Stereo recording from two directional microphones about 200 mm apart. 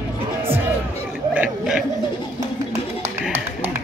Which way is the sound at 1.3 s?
5° right (ahead or behind).